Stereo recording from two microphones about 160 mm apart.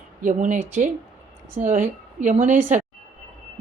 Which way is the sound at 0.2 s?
50° right (ahead or behind).